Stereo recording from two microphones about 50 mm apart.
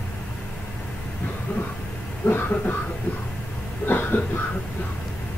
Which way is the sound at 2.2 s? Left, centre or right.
Left.